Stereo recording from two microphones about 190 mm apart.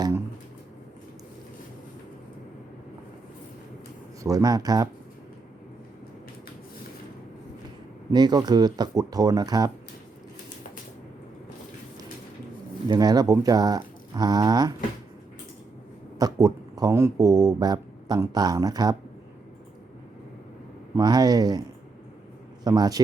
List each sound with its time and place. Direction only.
4.2 s speech: 15° right (ahead or behind)
8.1 s speech: 20° right (ahead or behind)
12.9 s speech: 20° right (ahead or behind)
16.1 s speech: 20° right (ahead or behind)
20.9 s speech: 20° right (ahead or behind)
22.6 s speech: 20° right (ahead or behind)